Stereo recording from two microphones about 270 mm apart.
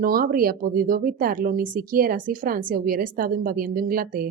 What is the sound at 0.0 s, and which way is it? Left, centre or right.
Speech, right.